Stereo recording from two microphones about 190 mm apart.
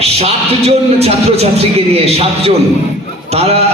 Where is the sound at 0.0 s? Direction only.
35° right (ahead or behind).